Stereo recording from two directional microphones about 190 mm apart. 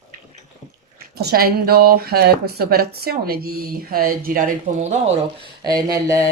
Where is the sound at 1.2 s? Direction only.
55° right (ahead or behind).